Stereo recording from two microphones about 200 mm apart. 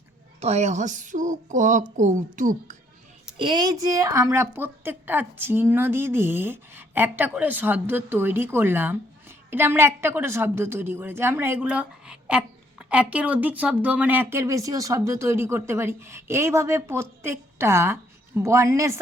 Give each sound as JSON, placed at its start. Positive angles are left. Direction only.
{"t": 0.3, "sound": "a woman's voice", "side_deg": -35}
{"t": 3.3, "sound": "speech", "side_deg": -25}